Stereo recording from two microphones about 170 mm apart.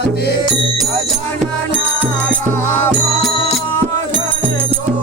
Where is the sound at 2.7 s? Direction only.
10° left (ahead or behind).